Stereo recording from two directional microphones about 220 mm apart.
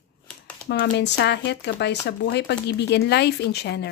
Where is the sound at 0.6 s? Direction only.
45° left (ahead or behind).